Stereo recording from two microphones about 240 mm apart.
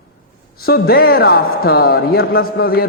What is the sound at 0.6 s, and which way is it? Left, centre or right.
A man's voice, left.